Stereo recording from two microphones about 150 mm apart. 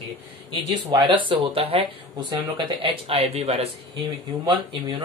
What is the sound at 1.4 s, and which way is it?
Speech, 40° right (ahead or behind).